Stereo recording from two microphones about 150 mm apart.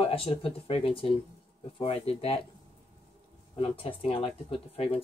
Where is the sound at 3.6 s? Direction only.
40° left (ahead or behind).